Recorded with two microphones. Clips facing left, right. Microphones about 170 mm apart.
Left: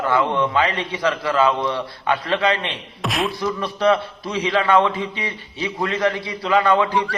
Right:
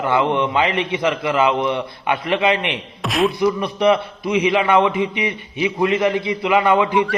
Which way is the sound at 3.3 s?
20° right (ahead or behind).